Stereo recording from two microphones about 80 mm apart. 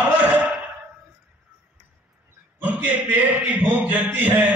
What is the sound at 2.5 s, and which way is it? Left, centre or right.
A man's voice, right.